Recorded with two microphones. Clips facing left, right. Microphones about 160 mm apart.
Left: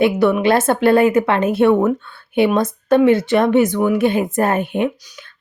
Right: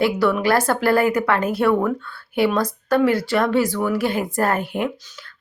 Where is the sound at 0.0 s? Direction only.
20° left (ahead or behind).